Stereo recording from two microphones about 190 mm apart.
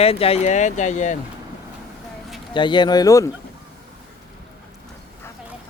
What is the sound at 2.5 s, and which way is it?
Speech, 25° left (ahead or behind).